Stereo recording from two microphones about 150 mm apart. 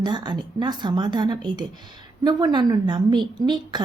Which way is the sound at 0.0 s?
30° right (ahead or behind).